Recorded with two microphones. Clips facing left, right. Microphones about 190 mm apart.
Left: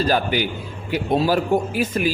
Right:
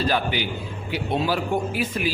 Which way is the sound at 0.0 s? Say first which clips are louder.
Left 4 dB; 45° left (ahead or behind).